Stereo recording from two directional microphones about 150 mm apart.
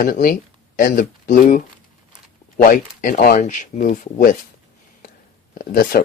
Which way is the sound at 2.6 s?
65° left (ahead or behind).